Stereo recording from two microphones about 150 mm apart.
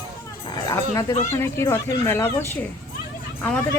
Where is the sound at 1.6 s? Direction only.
15° left (ahead or behind).